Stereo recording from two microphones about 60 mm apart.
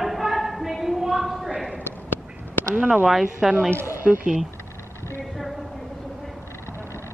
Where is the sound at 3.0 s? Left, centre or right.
Centre.